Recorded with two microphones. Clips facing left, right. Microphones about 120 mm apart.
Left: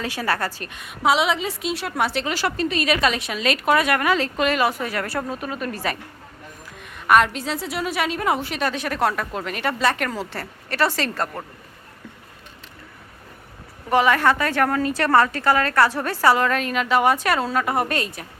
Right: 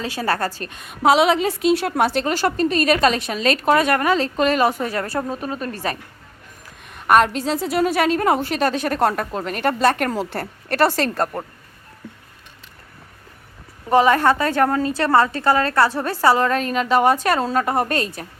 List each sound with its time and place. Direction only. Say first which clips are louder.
0.0 s a woman's voice: right 2 dB; 35° right (ahead or behind)
13.9 s a woman's voice: right 3 dB; 30° right (ahead or behind)